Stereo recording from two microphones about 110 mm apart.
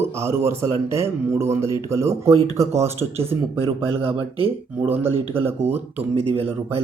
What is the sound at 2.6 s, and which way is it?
Speech, 70° right (ahead or behind).